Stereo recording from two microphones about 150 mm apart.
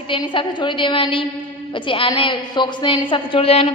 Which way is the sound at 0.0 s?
35° left (ahead or behind).